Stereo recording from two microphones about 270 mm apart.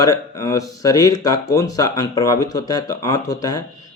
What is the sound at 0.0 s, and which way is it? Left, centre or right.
Speech, centre.